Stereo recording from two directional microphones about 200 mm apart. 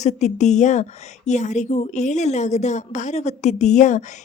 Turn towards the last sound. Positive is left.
turn(degrees=35)  # may be behind; listen again after turning